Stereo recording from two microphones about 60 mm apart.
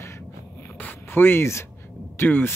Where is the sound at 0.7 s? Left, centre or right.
Left.